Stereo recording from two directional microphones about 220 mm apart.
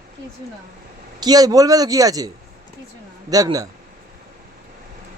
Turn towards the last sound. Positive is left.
turn(degrees=-15)  # may be behind; listen again after turning